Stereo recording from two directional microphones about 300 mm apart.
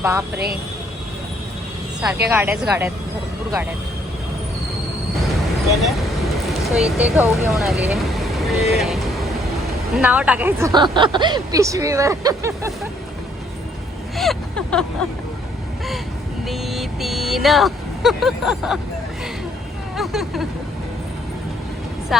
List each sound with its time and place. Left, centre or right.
0.3 s speech: right
2.3 s speech: centre
5.7 s vehicle: centre
7.0 s speech: centre
14.2 s a sound: centre
16.5 s speech: centre
20.0 s speech: centre
22.1 s vehicle: centre